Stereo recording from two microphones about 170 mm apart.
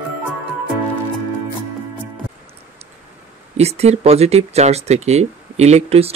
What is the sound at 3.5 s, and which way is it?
Speech, 40° right (ahead or behind).